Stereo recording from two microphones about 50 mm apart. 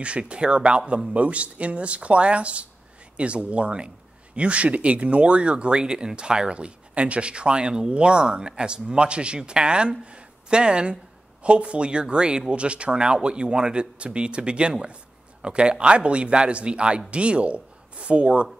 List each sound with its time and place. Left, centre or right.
0.0 s speech: right